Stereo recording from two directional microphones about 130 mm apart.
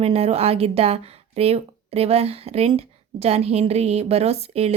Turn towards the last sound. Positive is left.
turn(degrees=-55)  # may be behind; listen again after turning